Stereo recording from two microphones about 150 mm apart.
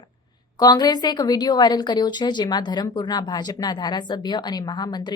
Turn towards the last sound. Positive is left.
turn(degrees=30)  # may be behind; listen again after turning